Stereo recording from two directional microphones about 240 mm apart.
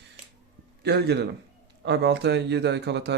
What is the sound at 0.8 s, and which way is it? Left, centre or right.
A man's voice, right.